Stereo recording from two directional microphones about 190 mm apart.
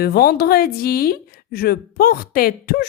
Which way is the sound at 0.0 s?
55° left (ahead or behind).